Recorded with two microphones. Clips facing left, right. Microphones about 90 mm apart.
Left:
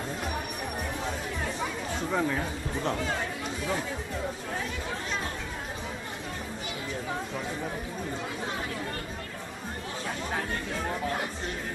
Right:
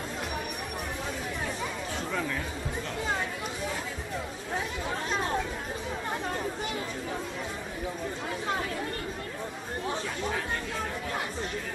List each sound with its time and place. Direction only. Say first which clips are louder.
2.1 s speech: left 5 dB; 20° left (ahead or behind)